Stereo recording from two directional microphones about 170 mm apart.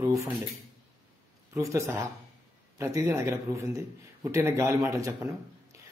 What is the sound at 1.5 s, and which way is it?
A man's voice, 15° right (ahead or behind).